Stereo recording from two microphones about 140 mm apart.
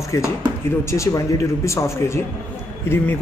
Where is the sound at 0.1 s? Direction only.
25° left (ahead or behind).